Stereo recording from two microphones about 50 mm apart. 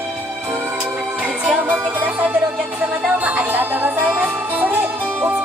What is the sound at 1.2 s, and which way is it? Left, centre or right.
Music, right.